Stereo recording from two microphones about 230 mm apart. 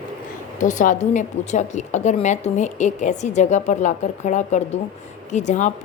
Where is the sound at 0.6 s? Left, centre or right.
Left.